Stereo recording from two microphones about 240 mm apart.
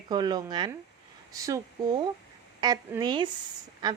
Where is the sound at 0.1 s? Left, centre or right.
Centre.